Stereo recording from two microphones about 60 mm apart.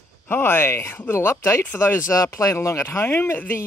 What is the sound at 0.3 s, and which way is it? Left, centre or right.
Speech, left.